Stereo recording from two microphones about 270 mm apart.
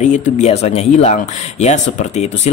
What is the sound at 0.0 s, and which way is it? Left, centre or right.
Speech, left.